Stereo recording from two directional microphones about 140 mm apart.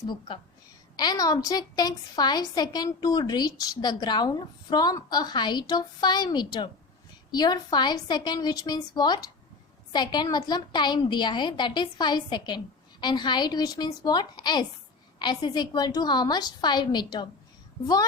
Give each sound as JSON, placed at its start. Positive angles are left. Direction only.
{"t": 0.9, "sound": "a woman's voice", "side_deg": 30}